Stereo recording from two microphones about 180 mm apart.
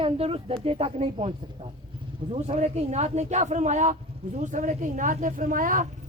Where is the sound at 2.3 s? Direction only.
35° right (ahead or behind).